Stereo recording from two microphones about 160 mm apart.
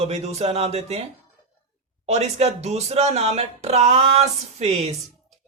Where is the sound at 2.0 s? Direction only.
45° right (ahead or behind).